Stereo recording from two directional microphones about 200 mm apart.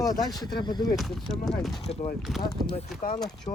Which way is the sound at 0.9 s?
Centre (ahead or behind).